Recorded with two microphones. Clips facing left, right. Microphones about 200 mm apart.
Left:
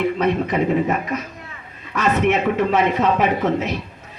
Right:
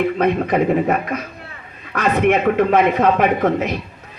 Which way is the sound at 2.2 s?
55° right (ahead or behind).